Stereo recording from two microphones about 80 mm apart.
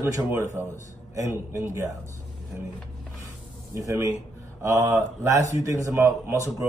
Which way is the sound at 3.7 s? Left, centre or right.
Right.